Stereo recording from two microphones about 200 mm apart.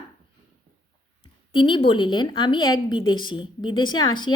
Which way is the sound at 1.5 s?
25° left (ahead or behind).